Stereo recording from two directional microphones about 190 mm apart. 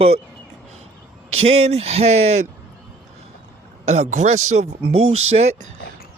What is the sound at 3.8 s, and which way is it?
Speech, 35° right (ahead or behind).